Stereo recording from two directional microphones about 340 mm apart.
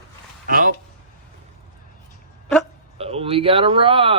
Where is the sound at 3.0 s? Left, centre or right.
Centre.